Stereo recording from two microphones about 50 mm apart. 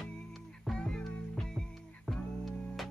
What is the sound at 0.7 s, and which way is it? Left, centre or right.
Music, centre.